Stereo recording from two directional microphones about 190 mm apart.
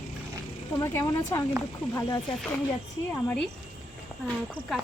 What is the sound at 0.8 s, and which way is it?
Speech, 15° left (ahead or behind).